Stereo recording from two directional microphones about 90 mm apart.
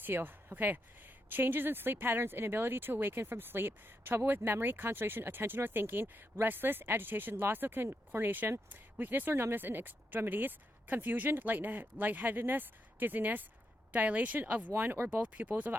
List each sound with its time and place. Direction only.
0.0 s speech: 20° right (ahead or behind)